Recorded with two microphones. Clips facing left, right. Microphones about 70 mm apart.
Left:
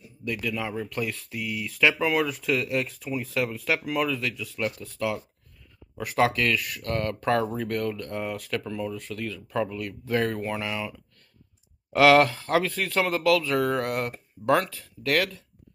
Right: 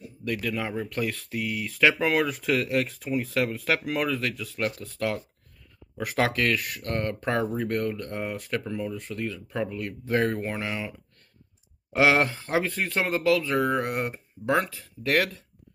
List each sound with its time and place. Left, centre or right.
0.3 s speech: right
5.9 s speech: right
7.0 s speech: right
15.0 s speech: right